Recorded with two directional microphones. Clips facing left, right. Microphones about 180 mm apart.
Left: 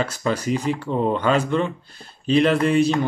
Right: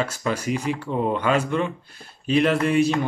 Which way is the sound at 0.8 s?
5° right (ahead or behind).